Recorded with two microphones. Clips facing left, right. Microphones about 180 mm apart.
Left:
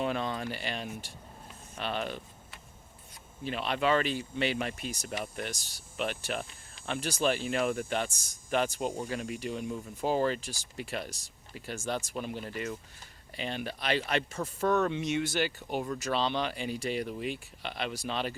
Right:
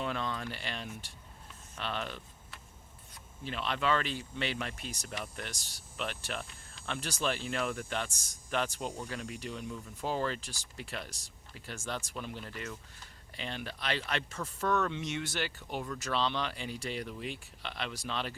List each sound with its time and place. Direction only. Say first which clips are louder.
0.0 s a sound: left 4 dB; 15° left (ahead or behind)
1.8 s speech: left 4 dB; 10° left (ahead or behind)
3.4 s speech: left 4 dB; 10° left (ahead or behind)
9.6 s speech: left 5 dB; 25° left (ahead or behind)
10.1 s speech: left 5 dB; 10° left (ahead or behind)
15.8 s speech: left 5 dB; 20° left (ahead or behind)
16.1 s speech: left 2 dB; 10° left (ahead or behind)